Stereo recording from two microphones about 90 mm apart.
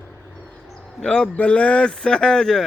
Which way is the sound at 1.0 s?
10° left (ahead or behind).